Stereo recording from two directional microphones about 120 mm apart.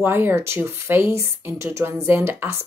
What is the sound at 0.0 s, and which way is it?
Speech, 20° right (ahead or behind).